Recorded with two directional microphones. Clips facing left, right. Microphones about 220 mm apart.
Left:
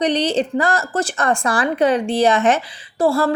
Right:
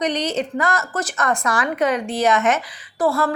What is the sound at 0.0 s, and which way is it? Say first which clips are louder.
A woman's voice: left 4 dB; 30° left (ahead or behind).